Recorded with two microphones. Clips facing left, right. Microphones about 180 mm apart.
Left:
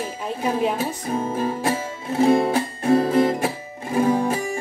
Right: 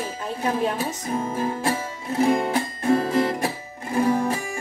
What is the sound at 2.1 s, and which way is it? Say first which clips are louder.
Music: left 3 dB; 30° left (ahead or behind).